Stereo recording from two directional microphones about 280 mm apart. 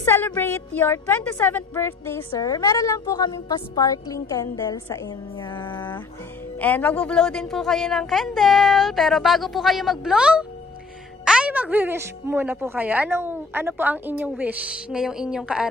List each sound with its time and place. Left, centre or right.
0.0 s a woman's voice: centre
5.5 s mantra: centre
6.6 s a woman's voice: centre